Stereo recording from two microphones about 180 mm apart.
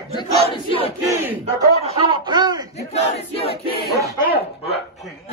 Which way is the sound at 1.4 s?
30° right (ahead or behind).